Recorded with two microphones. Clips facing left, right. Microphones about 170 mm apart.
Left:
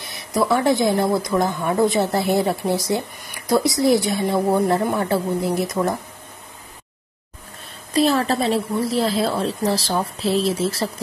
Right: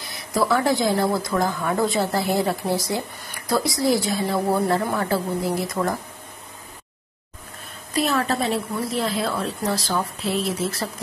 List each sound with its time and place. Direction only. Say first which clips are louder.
0.0 s speech: left 2 dB; 20° left (ahead or behind)
7.9 s a woman's voice: left 4 dB; 30° left (ahead or behind)